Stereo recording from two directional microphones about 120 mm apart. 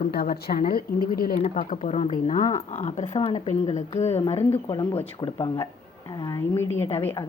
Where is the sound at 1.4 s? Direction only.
65° left (ahead or behind).